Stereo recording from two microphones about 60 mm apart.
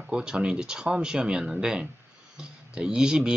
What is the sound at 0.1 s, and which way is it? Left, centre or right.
Speech, centre.